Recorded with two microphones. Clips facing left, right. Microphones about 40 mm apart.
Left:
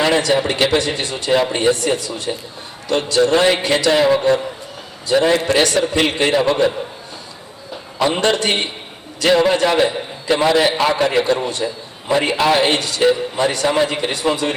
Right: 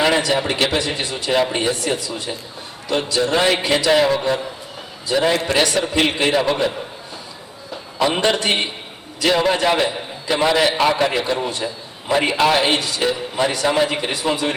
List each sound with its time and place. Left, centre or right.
0.0 s a man's voice: centre
8.2 s a man's voice: centre
13.0 s a man's voice: centre
13.4 s a man's voice: centre